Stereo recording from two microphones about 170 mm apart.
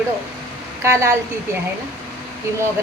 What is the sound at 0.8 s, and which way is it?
Speech, 15° right (ahead or behind).